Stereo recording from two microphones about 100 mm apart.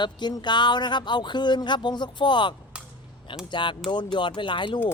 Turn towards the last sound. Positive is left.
turn(degrees=55)  # may be behind; listen again after turning